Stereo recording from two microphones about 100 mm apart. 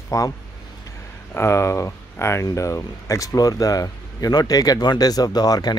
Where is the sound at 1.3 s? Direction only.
25° left (ahead or behind).